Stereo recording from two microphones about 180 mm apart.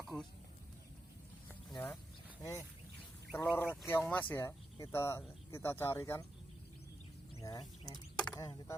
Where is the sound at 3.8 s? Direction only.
10° left (ahead or behind).